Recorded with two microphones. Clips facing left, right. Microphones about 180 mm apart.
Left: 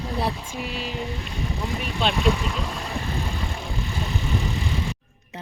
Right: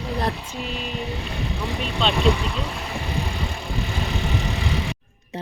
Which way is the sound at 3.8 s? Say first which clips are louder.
Right 3 dB; 85° right.